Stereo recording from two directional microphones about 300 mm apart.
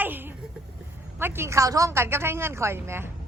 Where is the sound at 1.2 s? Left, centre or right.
Centre.